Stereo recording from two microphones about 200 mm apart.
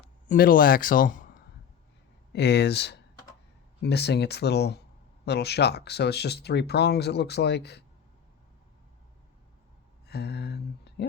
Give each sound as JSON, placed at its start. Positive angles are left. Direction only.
{"t": 0.0, "sound": "a man's voice", "side_deg": 45}
{"t": 2.3, "sound": "speech", "side_deg": 55}
{"t": 10.1, "sound": "a sound", "side_deg": 55}